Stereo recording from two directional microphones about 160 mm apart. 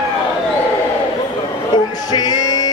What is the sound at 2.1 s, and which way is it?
Music, 25° left (ahead or behind).